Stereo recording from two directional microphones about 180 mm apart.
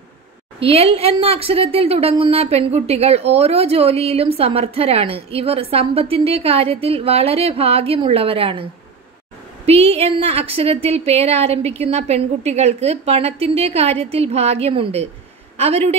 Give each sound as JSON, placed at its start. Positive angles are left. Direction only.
{"t": 0.6, "sound": "a woman's voice", "side_deg": -30}
{"t": 9.7, "sound": "a woman's voice", "side_deg": -35}